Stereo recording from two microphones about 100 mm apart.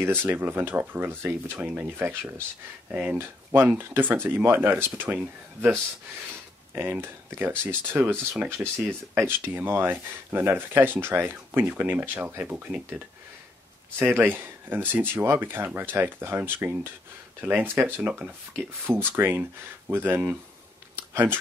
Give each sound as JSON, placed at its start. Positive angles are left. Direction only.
{"t": 0.0, "sound": "speech", "side_deg": -20}
{"t": 6.7, "sound": "speech", "side_deg": -20}
{"t": 13.9, "sound": "speech", "side_deg": -20}
{"t": 20.9, "sound": "a sound", "side_deg": -20}